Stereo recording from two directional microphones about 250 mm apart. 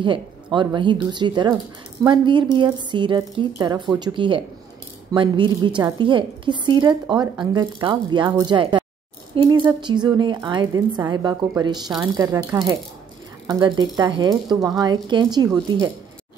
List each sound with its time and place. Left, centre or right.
0.0 s a woman's voice: centre